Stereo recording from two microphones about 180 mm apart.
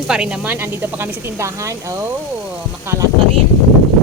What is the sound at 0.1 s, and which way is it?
Speech, 5° right (ahead or behind).